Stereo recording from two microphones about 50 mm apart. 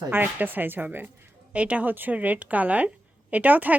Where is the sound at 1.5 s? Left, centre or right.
Right.